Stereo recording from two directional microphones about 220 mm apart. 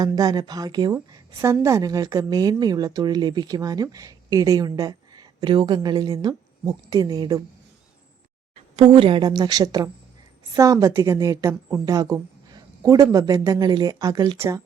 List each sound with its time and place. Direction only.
0.0 s a woman's voice: 15° right (ahead or behind)
8.7 s a woman's voice: 25° right (ahead or behind)